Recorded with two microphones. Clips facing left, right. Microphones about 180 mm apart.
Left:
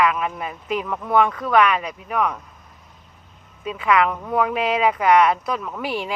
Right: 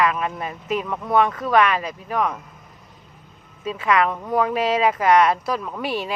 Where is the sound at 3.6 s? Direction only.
25° right (ahead or behind).